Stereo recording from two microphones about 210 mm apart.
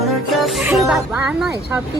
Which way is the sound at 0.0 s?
Centre (ahead or behind).